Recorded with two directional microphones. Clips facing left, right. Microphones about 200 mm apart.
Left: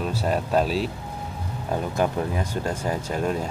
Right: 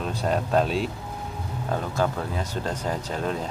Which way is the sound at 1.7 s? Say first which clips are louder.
Left 2 dB; 15° left (ahead or behind).